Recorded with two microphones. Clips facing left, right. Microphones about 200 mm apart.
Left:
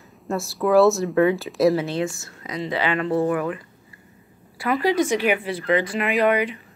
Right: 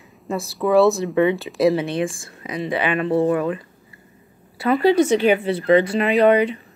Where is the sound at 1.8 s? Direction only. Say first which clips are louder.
Right 2 dB; 20° right (ahead or behind).